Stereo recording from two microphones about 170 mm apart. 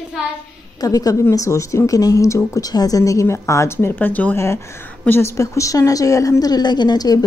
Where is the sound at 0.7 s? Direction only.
20° left (ahead or behind).